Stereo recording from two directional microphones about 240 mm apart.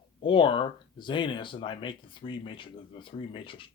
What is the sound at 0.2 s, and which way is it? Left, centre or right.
A man's voice, left.